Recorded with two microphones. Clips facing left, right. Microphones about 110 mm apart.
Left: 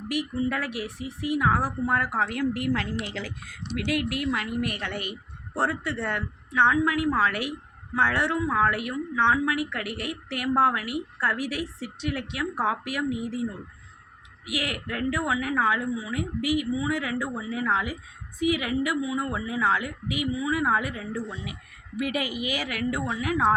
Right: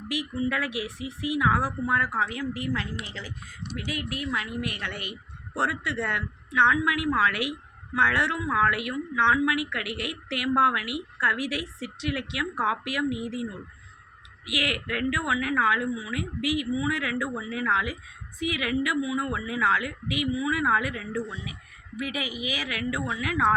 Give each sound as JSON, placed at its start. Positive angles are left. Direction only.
{"t": 0.4, "sound": "a woman's voice", "side_deg": 45}
{"t": 8.4, "sound": "a woman's voice", "side_deg": 25}
{"t": 8.7, "sound": "a woman's voice", "side_deg": 40}
{"t": 14.5, "sound": "a woman's voice", "side_deg": 35}